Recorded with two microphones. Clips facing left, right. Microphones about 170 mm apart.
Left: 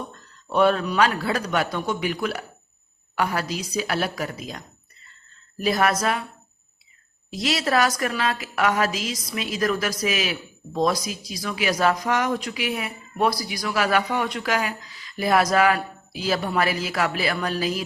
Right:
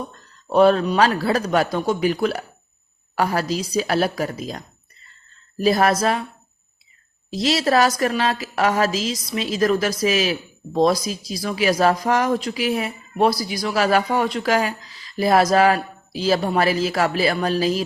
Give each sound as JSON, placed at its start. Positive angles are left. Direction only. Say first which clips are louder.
{"t": 0.5, "sound": "a woman's voice", "louder": "right 5 dB", "side_deg": -35}
{"t": 7.3, "sound": "a woman's voice", "louder": "right 4 dB", "side_deg": -30}